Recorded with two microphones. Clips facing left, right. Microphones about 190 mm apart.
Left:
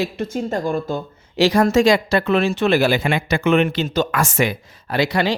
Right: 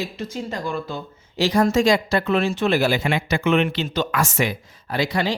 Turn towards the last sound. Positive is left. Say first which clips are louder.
# left 3 dB
turn(degrees=75)  # may be behind; listen again after turning